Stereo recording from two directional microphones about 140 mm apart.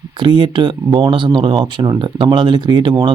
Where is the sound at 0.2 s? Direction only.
35° right (ahead or behind).